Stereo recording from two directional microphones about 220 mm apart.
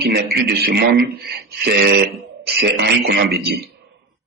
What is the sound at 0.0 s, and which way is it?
A man's voice, 45° right (ahead or behind).